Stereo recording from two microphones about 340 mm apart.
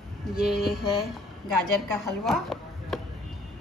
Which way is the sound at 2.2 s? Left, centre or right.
Centre.